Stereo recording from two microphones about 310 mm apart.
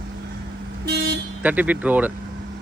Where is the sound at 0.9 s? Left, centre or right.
Right.